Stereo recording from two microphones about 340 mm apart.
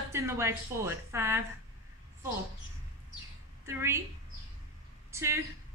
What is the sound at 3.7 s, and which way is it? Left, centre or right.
Speech, centre.